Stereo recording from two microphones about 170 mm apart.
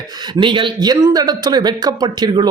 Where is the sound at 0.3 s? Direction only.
30° right (ahead or behind).